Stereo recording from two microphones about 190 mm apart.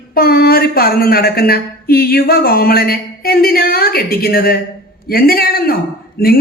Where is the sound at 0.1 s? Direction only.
55° left (ahead or behind).